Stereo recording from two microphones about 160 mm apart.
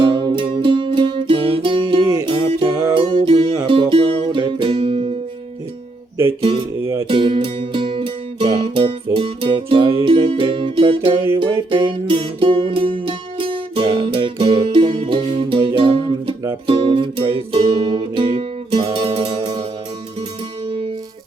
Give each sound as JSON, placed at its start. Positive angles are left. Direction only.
{"t": 0.0, "sound": "music", "side_deg": -30}
{"t": 7.0, "sound": "music", "side_deg": -35}
{"t": 20.7, "sound": "music", "side_deg": -35}